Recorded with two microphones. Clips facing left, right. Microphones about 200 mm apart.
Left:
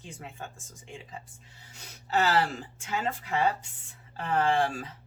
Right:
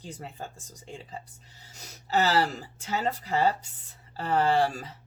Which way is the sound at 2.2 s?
35° right (ahead or behind).